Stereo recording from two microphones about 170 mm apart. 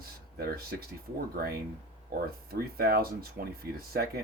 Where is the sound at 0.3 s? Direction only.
65° right (ahead or behind).